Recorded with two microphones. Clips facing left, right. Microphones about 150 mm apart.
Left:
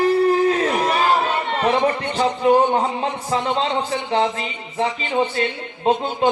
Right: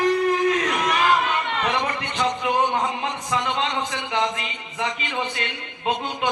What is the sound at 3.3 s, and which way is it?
A man's voice, 30° left (ahead or behind).